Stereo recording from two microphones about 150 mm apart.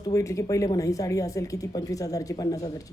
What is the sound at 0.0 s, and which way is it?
Speech, 20° left (ahead or behind).